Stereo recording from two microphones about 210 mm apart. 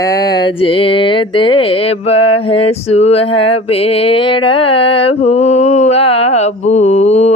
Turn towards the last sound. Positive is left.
turn(degrees=30)  # may be behind; listen again after turning